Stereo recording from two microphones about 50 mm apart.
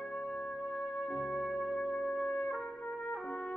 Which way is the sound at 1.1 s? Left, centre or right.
Centre.